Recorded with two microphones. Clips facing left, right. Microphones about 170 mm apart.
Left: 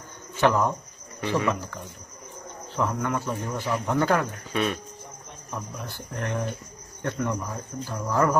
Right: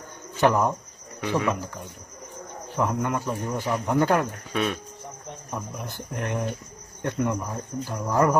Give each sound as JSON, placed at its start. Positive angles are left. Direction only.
{"t": 0.4, "sound": "a man's voice", "side_deg": -15}
{"t": 1.2, "sound": "a man's voice", "side_deg": 0}
{"t": 2.7, "sound": "a man's voice", "side_deg": -15}
{"t": 4.5, "sound": "a man's voice", "side_deg": 0}
{"t": 5.5, "sound": "a man's voice", "side_deg": -15}